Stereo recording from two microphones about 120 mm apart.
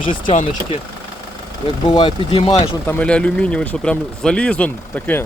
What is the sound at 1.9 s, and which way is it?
Speech, 35° left (ahead or behind).